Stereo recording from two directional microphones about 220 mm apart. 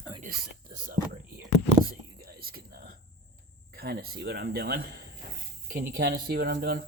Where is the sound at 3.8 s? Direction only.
45° right (ahead or behind).